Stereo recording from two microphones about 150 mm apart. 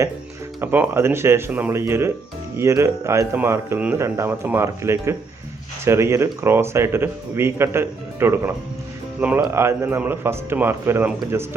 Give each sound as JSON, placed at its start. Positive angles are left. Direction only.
{"t": 0.6, "sound": "speech", "side_deg": -15}